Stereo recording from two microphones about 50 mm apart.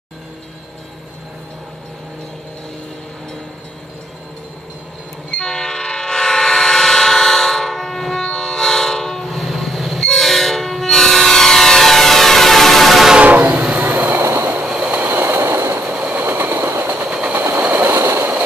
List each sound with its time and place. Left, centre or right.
5.3 s train: centre
13.2 s train: right
13.7 s train: right
14.2 s train: right
14.6 s train: right
16.0 s train: right
16.3 s train: right
16.8 s train: right
17.9 s train: right